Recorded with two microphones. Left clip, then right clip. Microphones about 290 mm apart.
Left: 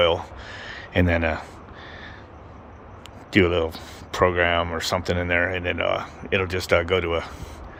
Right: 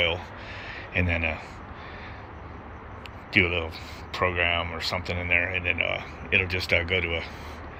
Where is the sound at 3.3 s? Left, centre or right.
Left.